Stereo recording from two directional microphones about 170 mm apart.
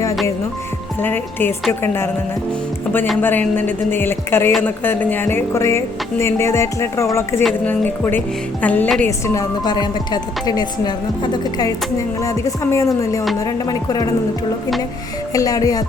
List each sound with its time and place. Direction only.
1.0 s speech: 10° left (ahead or behind)
3.2 s speech: 10° left (ahead or behind)
15.3 s speech: 20° left (ahead or behind)